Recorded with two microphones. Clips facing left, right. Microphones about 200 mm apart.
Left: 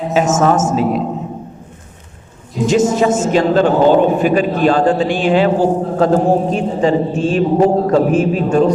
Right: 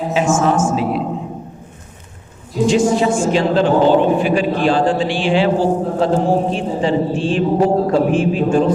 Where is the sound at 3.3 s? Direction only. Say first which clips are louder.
Left 2 dB; 45° left (ahead or behind).